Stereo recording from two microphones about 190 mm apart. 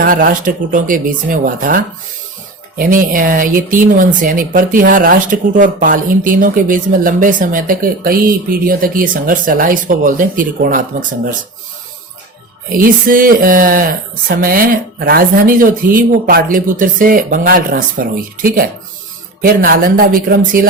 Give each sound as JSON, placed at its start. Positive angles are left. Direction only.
{"t": 0.0, "sound": "speech", "side_deg": -45}
{"t": 12.7, "sound": "speech", "side_deg": -45}
{"t": 19.4, "sound": "speech", "side_deg": -50}